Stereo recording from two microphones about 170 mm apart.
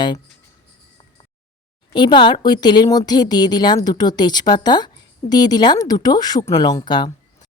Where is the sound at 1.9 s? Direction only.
25° left (ahead or behind).